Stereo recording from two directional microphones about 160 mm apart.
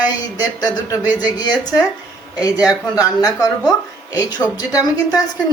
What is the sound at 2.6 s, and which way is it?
A woman's voice, 20° left (ahead or behind).